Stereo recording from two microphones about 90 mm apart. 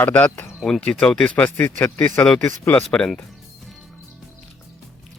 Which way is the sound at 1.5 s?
25° left (ahead or behind).